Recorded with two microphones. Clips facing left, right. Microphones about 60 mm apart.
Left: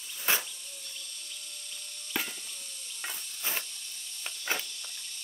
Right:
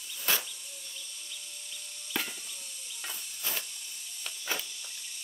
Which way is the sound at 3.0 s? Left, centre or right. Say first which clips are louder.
Left 2 dB; left.